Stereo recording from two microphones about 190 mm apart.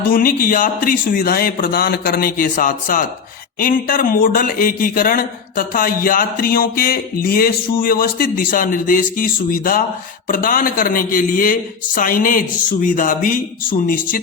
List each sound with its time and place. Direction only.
0.1 s a man's voice: 50° left (ahead or behind)